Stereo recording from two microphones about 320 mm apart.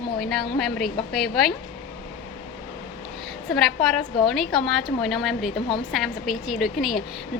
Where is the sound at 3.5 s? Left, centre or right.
Centre.